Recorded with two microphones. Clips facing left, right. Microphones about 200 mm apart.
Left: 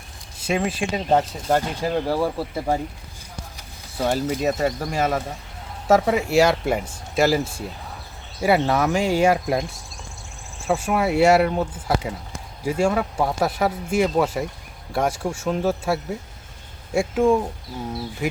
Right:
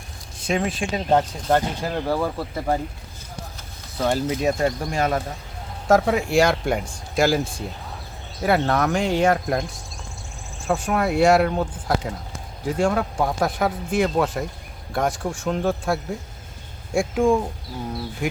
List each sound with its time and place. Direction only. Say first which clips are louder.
0.4 s speech: even; 5° left (ahead or behind)
3.9 s speech: even; 5° left (ahead or behind)
10.7 s speech: left 1 dB; 5° left (ahead or behind)